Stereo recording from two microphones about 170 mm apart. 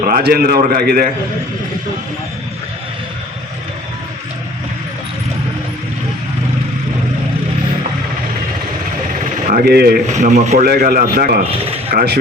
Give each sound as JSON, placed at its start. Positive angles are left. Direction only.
{"t": 0.0, "sound": "a man's voice", "side_deg": -65}
{"t": 9.5, "sound": "a man's voice", "side_deg": -60}
{"t": 10.1, "sound": "speech", "side_deg": -45}
{"t": 10.7, "sound": "a man's voice", "side_deg": -60}
{"t": 11.6, "sound": "a man's voice", "side_deg": -35}